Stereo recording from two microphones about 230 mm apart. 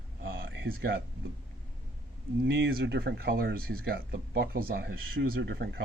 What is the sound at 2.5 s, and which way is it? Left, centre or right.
Speech, right.